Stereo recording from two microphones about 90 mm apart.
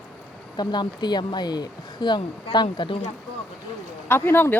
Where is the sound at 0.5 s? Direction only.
55° left (ahead or behind).